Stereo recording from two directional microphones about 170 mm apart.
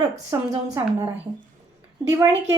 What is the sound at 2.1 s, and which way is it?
Speech, 15° right (ahead or behind).